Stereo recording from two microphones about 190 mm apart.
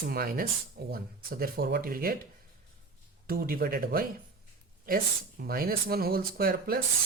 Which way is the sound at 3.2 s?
50° right (ahead or behind).